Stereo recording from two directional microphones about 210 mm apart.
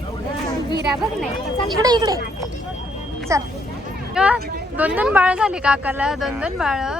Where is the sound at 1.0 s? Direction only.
Centre (ahead or behind).